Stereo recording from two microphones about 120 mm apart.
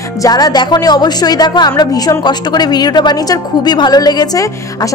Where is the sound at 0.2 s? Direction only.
35° left (ahead or behind).